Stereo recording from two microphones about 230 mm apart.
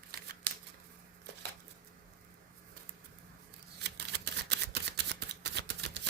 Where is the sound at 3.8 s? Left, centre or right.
Right.